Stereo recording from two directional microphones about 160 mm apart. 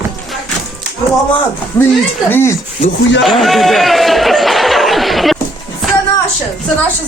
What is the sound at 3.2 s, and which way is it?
Speech, centre (ahead or behind).